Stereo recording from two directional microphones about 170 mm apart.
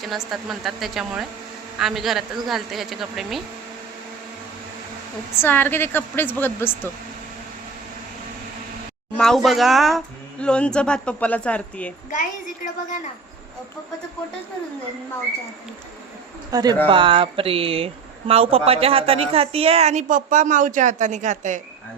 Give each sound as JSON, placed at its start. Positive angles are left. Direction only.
{"t": 0.0, "sound": "speech", "side_deg": 0}
{"t": 5.4, "sound": "a woman's voice", "side_deg": 10}
{"t": 9.1, "sound": "a woman's voice", "side_deg": 0}
{"t": 16.5, "sound": "speech", "side_deg": -20}